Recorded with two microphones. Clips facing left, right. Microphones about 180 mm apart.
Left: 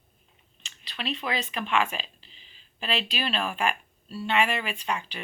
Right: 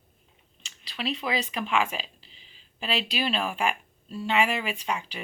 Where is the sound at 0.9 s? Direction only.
10° right (ahead or behind).